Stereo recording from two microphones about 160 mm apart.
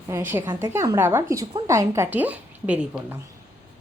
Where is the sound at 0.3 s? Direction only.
15° right (ahead or behind).